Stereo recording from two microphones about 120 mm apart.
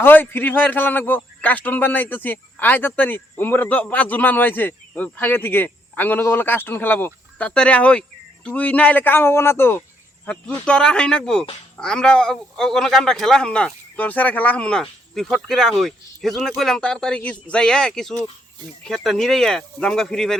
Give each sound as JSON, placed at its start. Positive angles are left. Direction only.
{"t": 0.0, "sound": "a man's voice", "side_deg": 15}
{"t": 10.2, "sound": "a man's voice", "side_deg": 10}